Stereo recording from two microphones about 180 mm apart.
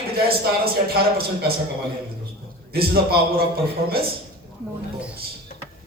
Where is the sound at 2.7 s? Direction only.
60° right (ahead or behind).